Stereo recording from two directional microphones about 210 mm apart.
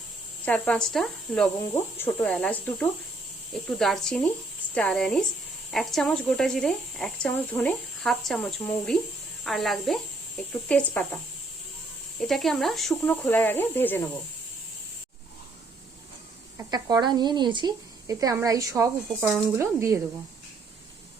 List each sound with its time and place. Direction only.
0.4 s speech: 5° left (ahead or behind)
12.2 s speech: centre (ahead or behind)
16.7 s speech: 20° right (ahead or behind)